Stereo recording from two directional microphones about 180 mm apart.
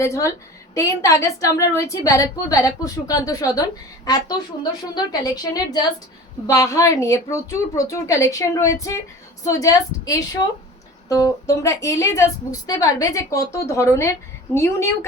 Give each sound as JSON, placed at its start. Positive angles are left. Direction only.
{"t": 0.0, "sound": "a woman's voice", "side_deg": 15}